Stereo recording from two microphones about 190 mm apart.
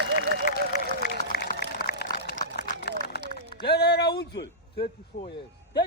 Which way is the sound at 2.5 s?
60° left (ahead or behind).